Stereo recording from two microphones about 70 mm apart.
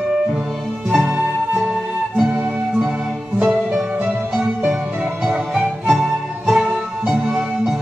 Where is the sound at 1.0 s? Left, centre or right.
Right.